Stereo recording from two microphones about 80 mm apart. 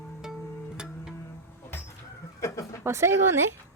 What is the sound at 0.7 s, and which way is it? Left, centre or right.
Music, centre.